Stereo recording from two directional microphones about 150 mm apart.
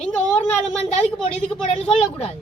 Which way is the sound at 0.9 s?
45° left (ahead or behind).